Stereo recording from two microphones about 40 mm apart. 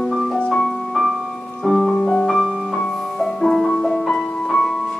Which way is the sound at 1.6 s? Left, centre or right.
Centre.